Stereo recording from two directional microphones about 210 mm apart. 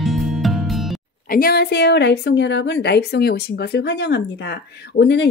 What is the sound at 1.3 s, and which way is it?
A woman's voice, 45° left (ahead or behind).